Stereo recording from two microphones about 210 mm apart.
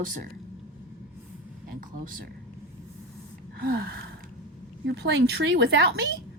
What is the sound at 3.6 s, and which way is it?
Speech, 45° right (ahead or behind).